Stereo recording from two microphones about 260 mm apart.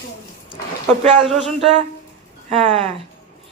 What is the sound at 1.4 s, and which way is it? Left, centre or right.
Speech, centre.